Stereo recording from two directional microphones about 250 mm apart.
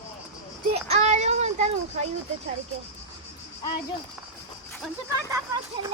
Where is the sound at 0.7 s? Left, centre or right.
Right.